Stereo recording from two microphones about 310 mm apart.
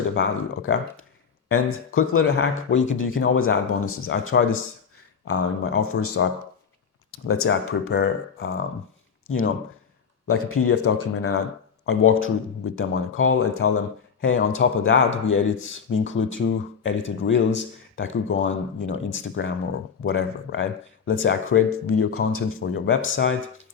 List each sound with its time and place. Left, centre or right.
0.1 s a man's voice: left